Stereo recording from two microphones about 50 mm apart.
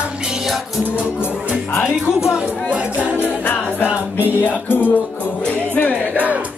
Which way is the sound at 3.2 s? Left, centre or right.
Left.